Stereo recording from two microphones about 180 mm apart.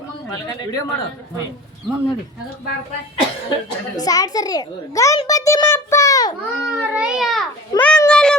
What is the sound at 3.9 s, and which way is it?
A child's voice, 20° left (ahead or behind).